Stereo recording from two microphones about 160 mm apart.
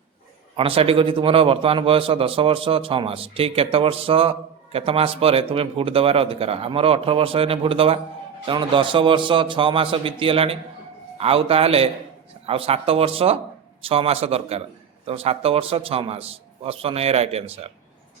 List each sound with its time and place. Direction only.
0.5 s a man's voice: 35° right (ahead or behind)